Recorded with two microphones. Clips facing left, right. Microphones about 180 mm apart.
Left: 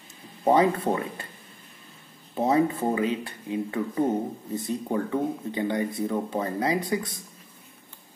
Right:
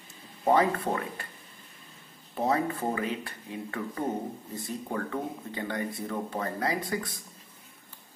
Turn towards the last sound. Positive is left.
turn(degrees=20)  # may be behind; listen again after turning